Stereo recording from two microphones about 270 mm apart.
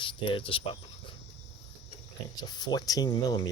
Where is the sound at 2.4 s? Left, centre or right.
Centre.